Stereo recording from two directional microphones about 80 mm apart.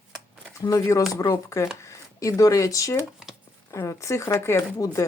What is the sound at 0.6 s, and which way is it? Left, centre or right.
Speech, left.